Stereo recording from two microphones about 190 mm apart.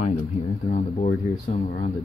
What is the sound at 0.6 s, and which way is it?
Speech, 35° left (ahead or behind).